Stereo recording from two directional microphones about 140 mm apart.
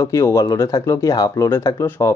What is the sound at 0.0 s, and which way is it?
Speech, 20° left (ahead or behind).